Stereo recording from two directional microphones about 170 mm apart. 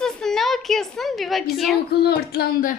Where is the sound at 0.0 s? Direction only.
5° left (ahead or behind).